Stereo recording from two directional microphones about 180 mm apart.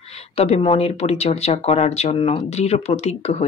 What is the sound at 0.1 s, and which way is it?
Speech, 35° left (ahead or behind).